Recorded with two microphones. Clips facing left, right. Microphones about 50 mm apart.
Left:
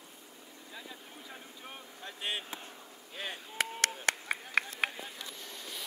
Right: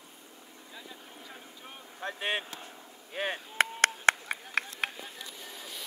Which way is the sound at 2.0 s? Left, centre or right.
Right.